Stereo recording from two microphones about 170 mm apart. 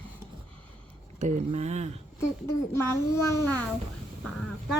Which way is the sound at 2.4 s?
15° left (ahead or behind).